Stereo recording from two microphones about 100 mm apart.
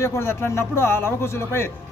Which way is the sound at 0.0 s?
25° left (ahead or behind).